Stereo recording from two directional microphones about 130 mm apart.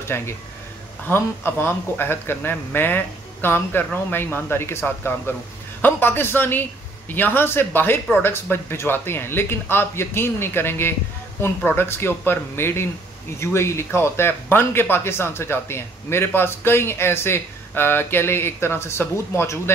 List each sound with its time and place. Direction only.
0.1 s a man's voice: 15° left (ahead or behind)